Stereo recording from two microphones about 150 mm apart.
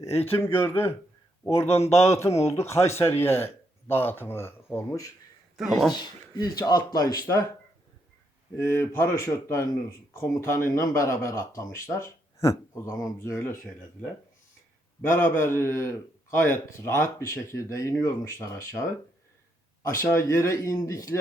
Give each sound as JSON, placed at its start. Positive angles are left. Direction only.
{"t": 0.0, "sound": "a man's voice", "side_deg": 15}
{"t": 5.5, "sound": "speech", "side_deg": 0}
{"t": 5.9, "sound": "speech", "side_deg": 30}
{"t": 8.5, "sound": "a man's voice", "side_deg": 15}
{"t": 15.0, "sound": "a man's voice", "side_deg": 15}
{"t": 20.0, "sound": "speech", "side_deg": 20}